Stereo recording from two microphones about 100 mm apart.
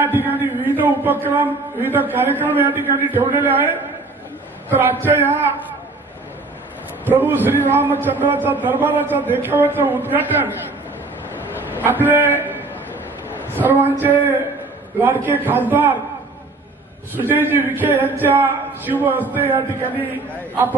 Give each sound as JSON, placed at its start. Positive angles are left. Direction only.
{"t": 0.0, "sound": "a man's voice", "side_deg": -20}
{"t": 7.1, "sound": "a man's voice", "side_deg": -20}
{"t": 11.7, "sound": "a sound", "side_deg": -20}
{"t": 13.7, "sound": "a man's voice", "side_deg": -20}
{"t": 17.1, "sound": "a man's voice", "side_deg": -20}